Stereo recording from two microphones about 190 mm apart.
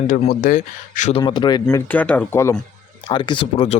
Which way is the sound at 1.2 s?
20° left (ahead or behind).